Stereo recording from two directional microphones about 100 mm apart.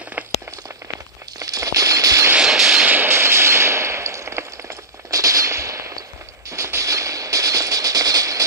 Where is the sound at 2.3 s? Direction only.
5° right (ahead or behind); by 4.4 s 30° right (ahead or behind).